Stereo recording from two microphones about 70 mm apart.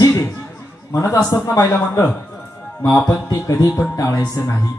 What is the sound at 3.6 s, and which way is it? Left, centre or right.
Speech, left.